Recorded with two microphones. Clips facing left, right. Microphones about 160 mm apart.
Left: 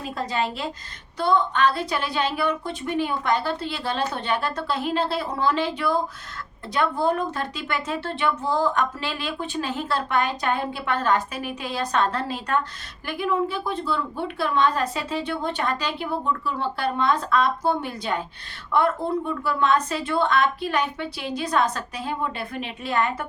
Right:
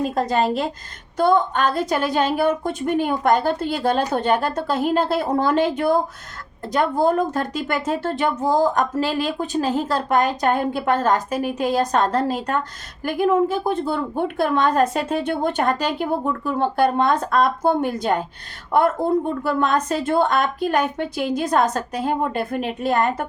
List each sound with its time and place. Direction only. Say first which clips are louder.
0.0 s speech: right 7 dB; 45° right (ahead or behind)